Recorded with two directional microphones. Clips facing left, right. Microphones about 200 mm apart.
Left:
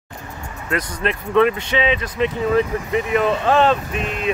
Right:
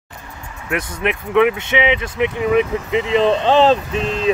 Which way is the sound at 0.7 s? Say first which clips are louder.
Right 2 dB; 15° right (ahead or behind).